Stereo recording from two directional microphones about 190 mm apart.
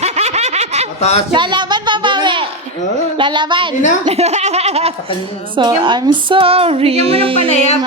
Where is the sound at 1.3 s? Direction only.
25° right (ahead or behind).